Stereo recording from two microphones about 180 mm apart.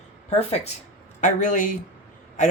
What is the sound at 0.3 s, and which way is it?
Speech, 35° left (ahead or behind).